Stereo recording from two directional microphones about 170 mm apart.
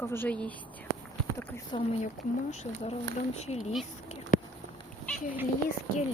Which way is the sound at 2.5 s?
40° left (ahead or behind).